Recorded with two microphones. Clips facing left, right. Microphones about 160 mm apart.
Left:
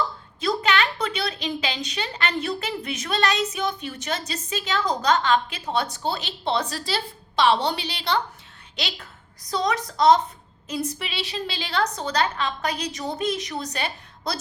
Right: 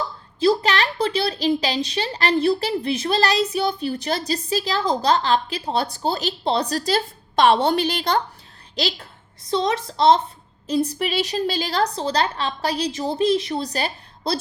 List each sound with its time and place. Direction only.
0.3 s a woman's voice: 35° right (ahead or behind)
8.7 s a woman's voice: 35° right (ahead or behind)